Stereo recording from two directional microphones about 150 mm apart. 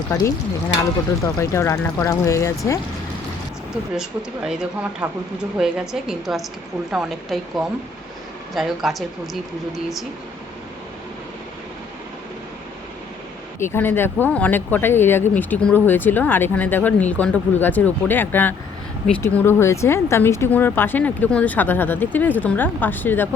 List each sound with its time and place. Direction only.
0.1 s speech: 20° left (ahead or behind)
4.4 s a woman's voice: 5° right (ahead or behind)
13.6 s speech: 15° left (ahead or behind)